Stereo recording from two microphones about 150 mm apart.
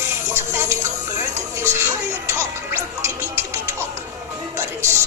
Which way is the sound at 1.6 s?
20° right (ahead or behind).